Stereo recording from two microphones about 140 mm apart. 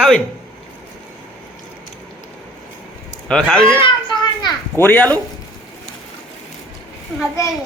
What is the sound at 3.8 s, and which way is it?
Children playing, 30° left (ahead or behind).